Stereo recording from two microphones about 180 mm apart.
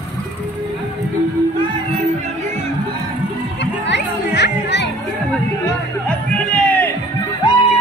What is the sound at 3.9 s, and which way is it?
Music, 70° left (ahead or behind).